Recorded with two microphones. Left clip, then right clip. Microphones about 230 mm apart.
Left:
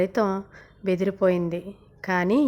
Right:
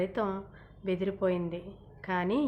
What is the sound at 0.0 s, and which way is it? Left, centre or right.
A woman's voice, left.